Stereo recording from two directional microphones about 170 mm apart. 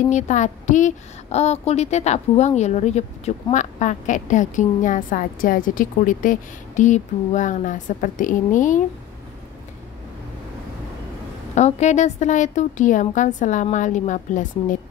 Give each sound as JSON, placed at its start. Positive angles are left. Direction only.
{"t": 0.1, "sound": "a woman's voice", "side_deg": 45}
{"t": 11.5, "sound": "a woman's voice", "side_deg": 45}